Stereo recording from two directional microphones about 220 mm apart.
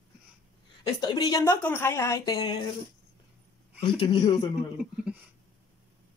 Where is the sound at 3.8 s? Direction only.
20° left (ahead or behind).